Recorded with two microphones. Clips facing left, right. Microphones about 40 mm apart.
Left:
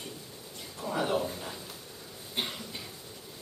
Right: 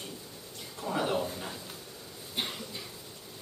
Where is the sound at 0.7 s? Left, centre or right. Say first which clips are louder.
Even; centre.